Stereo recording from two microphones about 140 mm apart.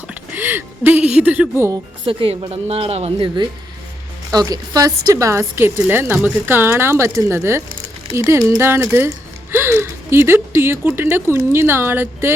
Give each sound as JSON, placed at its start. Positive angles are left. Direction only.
{"t": 0.1, "sound": "speech", "side_deg": -15}
{"t": 2.0, "sound": "a woman's voice", "side_deg": -40}
{"t": 4.3, "sound": "speech", "side_deg": -25}